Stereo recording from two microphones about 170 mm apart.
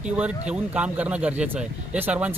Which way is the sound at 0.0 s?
5° right (ahead or behind).